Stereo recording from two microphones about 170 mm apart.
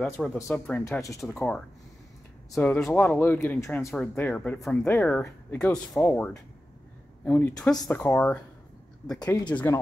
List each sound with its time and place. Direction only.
0.0 s speech: centre (ahead or behind); by 9.5 s 20° left (ahead or behind)
9.5 s speech: 10° left (ahead or behind)